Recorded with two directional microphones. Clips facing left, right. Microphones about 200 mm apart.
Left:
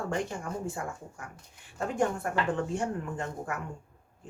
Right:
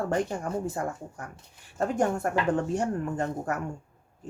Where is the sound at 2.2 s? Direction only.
45° right (ahead or behind).